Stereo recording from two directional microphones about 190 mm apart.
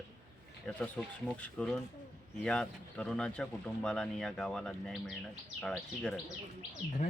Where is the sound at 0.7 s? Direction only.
5° left (ahead or behind).